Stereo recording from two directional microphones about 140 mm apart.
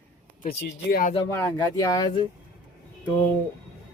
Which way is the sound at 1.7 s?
25° left (ahead or behind).